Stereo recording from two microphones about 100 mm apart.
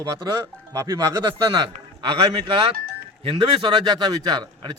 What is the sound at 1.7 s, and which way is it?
A man's voice, 65° right (ahead or behind).